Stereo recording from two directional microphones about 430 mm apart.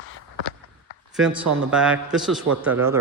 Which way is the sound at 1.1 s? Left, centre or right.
Centre.